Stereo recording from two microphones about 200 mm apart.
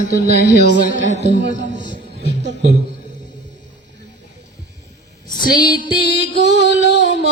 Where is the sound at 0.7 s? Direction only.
70° right (ahead or behind).